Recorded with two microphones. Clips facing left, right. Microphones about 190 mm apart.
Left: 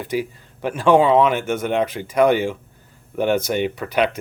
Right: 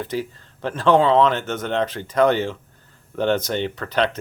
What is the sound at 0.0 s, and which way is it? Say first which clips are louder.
Speech: left 2 dB; 10° left (ahead or behind).